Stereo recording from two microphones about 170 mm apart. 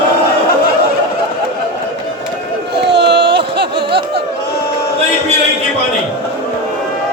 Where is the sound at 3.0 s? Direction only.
80° right.